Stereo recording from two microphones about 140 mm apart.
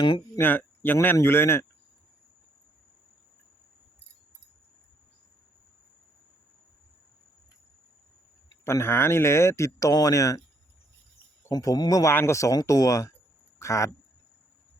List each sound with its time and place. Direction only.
0.3 s speech: 15° left (ahead or behind)
8.6 s speech: 20° left (ahead or behind)
11.4 s speech: 25° left (ahead or behind)